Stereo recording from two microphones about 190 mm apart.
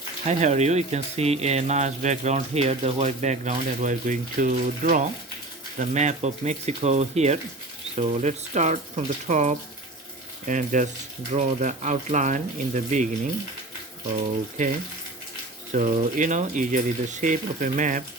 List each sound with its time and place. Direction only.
0.3 s speech: 35° right (ahead or behind)
15.7 s speech: 35° right (ahead or behind)